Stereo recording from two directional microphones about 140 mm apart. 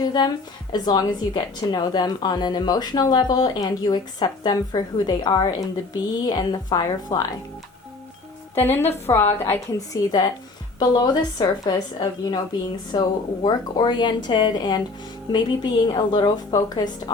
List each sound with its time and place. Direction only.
0.0 s a woman's voice: 30° left (ahead or behind)
8.5 s a woman's voice: 15° left (ahead or behind)
9.9 s a woman's voice: 25° left (ahead or behind)